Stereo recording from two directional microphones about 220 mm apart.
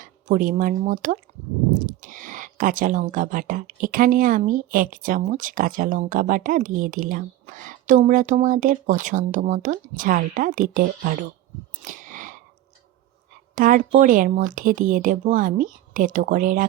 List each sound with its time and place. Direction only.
0.0 s speech: 40° right (ahead or behind)
11.9 s chewing: 35° right (ahead or behind)
13.6 s speech: 40° right (ahead or behind)